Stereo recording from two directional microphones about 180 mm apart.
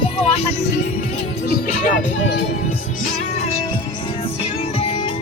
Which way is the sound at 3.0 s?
40° left (ahead or behind).